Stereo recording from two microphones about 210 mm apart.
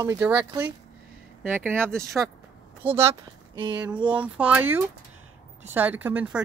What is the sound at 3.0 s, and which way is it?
Speech, 20° right (ahead or behind).